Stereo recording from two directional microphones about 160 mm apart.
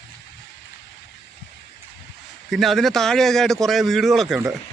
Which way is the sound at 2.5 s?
Centre (ahead or behind).